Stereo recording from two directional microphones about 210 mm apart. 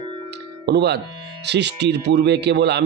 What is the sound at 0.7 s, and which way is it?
Speech, 50° right (ahead or behind).